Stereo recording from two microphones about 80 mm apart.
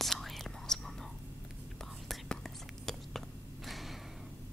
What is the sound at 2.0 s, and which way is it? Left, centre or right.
Whispering, centre.